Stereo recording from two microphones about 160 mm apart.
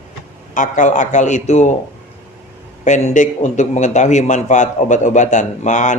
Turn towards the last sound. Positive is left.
turn(degrees=50)  # may be behind; listen again after turning